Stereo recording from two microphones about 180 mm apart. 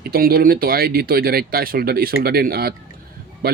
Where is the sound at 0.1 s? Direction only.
55° right (ahead or behind).